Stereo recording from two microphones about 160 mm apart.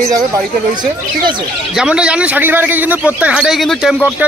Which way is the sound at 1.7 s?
5° right (ahead or behind).